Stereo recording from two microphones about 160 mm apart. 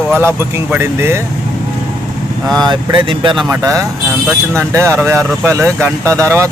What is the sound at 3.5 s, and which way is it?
Speech, 20° right (ahead or behind).